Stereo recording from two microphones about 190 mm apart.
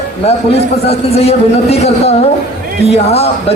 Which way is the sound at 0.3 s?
35° left (ahead or behind).